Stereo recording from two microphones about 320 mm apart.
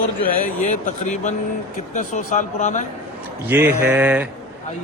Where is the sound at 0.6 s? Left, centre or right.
Left.